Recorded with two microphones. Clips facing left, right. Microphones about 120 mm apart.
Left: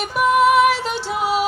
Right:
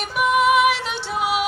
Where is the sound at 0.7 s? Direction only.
40° left (ahead or behind).